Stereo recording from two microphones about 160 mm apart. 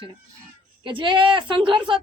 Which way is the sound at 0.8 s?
30° right (ahead or behind).